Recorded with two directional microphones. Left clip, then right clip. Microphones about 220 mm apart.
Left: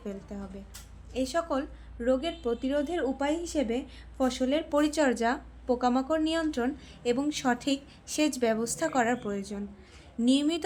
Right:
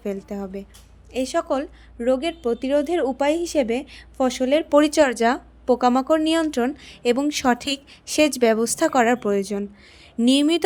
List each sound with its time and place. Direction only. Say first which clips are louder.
0.0 s a woman's voice: right 11 dB; 35° right (ahead or behind)